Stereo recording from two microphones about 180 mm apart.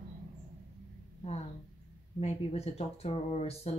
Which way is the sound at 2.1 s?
35° left (ahead or behind).